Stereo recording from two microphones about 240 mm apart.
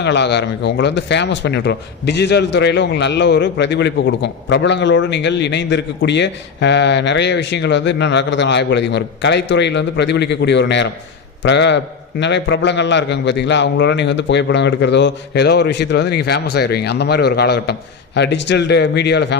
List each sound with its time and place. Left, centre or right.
0.0 s speech: left